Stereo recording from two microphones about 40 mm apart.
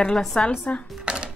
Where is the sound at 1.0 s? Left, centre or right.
Right.